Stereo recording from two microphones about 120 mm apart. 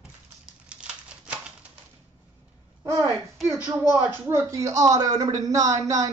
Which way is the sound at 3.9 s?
20° right (ahead or behind).